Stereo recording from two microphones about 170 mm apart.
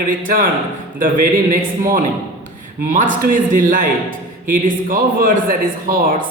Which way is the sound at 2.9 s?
55° right (ahead or behind).